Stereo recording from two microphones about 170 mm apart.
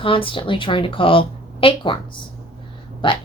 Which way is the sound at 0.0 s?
30° left (ahead or behind).